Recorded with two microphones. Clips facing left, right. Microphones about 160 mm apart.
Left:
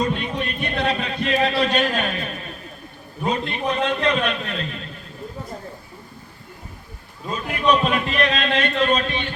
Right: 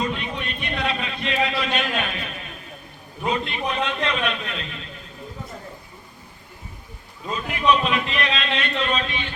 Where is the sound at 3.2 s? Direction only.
40° left (ahead or behind).